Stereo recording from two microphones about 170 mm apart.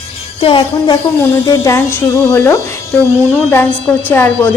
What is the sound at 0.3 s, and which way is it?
Speech, 30° left (ahead or behind).